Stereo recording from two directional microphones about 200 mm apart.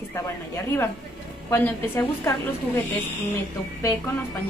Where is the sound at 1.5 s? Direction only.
15° left (ahead or behind).